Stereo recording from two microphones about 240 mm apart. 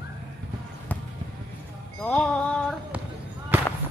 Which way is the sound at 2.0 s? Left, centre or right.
Centre.